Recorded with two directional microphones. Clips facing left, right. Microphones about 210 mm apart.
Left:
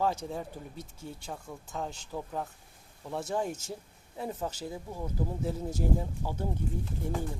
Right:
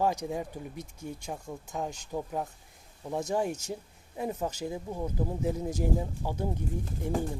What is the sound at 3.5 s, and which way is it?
Speech, 40° right (ahead or behind).